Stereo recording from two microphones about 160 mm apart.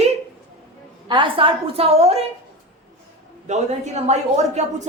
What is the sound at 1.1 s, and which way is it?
A woman's voice, 30° right (ahead or behind).